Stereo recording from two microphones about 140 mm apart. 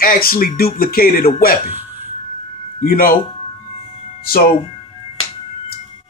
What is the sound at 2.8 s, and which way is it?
Speech, 90° left.